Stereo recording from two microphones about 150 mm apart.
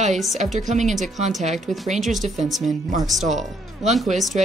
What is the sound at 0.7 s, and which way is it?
Speech, 55° right (ahead or behind).